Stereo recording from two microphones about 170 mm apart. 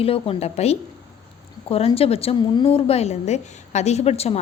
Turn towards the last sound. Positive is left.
turn(degrees=35)  # may be behind; listen again after turning